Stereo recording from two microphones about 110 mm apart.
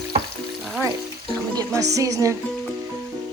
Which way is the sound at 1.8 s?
30° right (ahead or behind).